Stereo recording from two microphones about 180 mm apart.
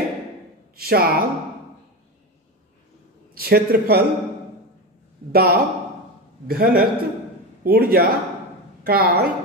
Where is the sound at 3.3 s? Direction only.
60° right (ahead or behind).